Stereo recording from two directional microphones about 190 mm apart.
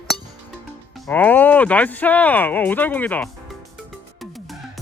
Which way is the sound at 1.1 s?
10° left (ahead or behind).